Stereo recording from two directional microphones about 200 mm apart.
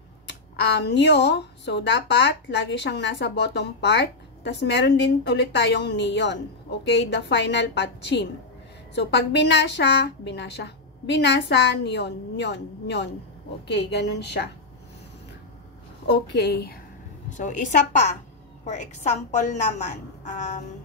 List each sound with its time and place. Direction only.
0.3 s speech: 60° left (ahead or behind)
16.3 s speech: 55° left (ahead or behind)
17.3 s a woman's voice: 40° left (ahead or behind)